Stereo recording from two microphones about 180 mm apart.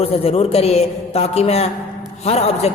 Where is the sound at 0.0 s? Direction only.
35° left (ahead or behind).